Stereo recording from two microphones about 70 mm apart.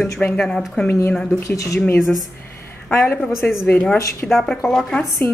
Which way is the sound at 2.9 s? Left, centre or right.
Left.